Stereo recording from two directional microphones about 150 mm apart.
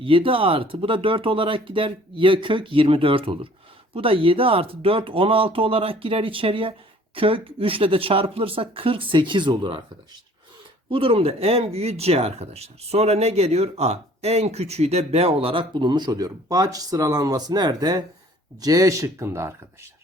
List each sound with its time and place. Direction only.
0.0 s speech: 35° right (ahead or behind)
10.8 s speech: 35° right (ahead or behind); by 19.9 s 15° right (ahead or behind)